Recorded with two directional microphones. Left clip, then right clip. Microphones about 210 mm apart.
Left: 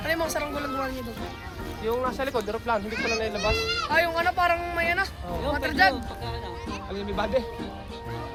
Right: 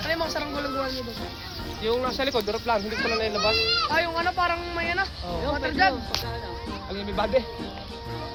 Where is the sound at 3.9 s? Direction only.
45° left (ahead or behind).